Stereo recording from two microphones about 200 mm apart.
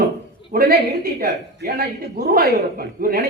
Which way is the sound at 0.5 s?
50° right (ahead or behind).